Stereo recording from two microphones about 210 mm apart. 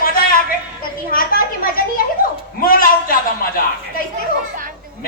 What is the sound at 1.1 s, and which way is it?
Speech, 45° left (ahead or behind).